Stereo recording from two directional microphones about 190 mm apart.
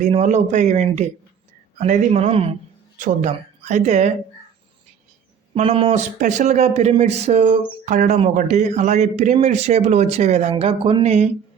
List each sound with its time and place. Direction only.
0.0 s speech: 35° right (ahead or behind)
3.0 s speech: 40° right (ahead or behind)
5.5 s speech: 30° right (ahead or behind)